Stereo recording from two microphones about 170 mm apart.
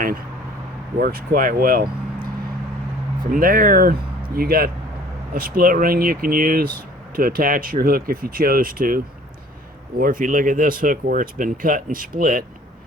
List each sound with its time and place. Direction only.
0.9 s speech: 60° right (ahead or behind)
3.3 s speech: 55° right (ahead or behind)
10.0 s speech: 55° right (ahead or behind)